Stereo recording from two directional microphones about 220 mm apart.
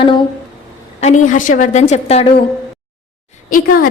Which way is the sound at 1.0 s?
35° left (ahead or behind).